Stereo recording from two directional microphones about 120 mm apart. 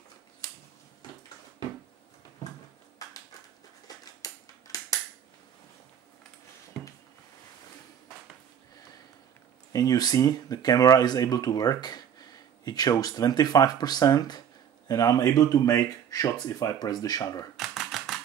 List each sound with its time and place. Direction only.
3.8 s scissors: 30° left (ahead or behind)
9.7 s speech: 30° left (ahead or behind)
17.6 s typewriter: centre (ahead or behind)